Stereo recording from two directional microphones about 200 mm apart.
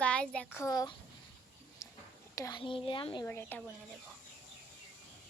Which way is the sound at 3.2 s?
10° left (ahead or behind).